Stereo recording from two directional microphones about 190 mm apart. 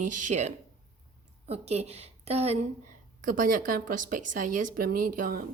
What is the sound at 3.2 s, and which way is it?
A woman's voice, 45° right (ahead or behind).